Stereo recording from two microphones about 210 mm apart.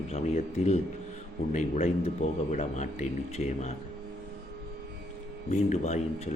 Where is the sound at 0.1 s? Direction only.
30° left (ahead or behind).